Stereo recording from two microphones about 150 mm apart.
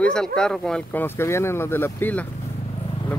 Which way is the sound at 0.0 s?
5° left (ahead or behind).